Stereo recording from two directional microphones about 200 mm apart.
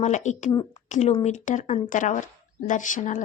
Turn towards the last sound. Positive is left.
turn(degrees=40)  # may be behind; listen again after turning